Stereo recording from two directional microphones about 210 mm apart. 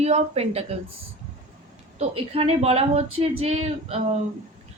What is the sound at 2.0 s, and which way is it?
A woman's voice, 30° right (ahead or behind).